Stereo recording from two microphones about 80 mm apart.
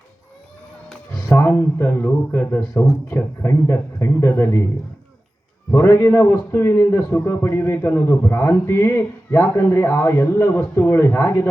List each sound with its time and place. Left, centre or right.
1.5 s a man's voice: left
5.7 s a man's voice: left